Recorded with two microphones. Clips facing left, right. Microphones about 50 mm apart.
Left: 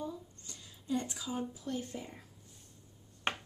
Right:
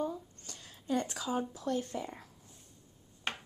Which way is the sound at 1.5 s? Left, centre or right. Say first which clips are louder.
Right 5 dB; right.